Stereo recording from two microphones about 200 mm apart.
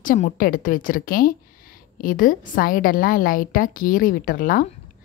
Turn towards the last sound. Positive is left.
turn(degrees=45)  # may be behind; listen again after turning